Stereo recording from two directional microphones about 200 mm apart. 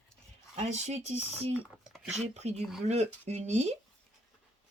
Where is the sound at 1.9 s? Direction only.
5° right (ahead or behind).